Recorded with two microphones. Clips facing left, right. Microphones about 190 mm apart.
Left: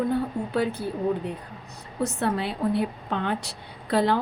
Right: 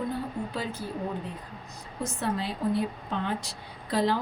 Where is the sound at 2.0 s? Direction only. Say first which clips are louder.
Left 5 dB; 65° left (ahead or behind).